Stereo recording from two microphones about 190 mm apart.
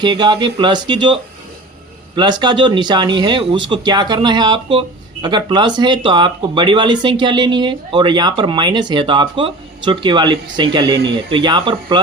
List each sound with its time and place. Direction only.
0.0 s speech: 25° right (ahead or behind)